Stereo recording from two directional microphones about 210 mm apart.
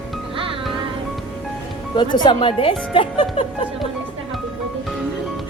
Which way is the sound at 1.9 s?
20° left (ahead or behind).